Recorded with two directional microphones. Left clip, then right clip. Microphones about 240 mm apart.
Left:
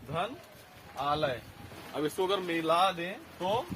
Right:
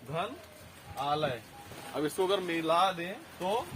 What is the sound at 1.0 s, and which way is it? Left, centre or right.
Speech, centre.